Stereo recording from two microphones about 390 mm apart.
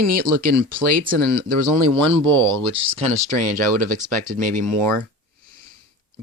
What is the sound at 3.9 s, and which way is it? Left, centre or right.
Speech, centre.